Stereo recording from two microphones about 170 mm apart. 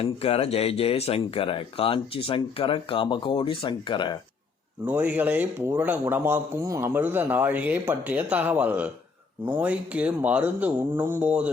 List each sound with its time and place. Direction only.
0.0 s speech: 35° left (ahead or behind)
4.9 s a man's voice: 10° right (ahead or behind)